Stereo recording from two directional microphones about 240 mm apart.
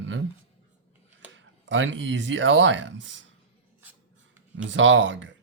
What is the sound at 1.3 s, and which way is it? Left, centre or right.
Speech, right.